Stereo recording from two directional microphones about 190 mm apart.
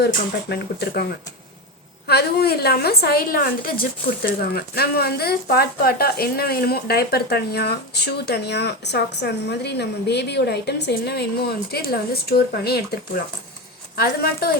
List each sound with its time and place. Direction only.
0.0 s a woman's voice: 60° left (ahead or behind)
2.0 s a woman's voice: 55° left (ahead or behind)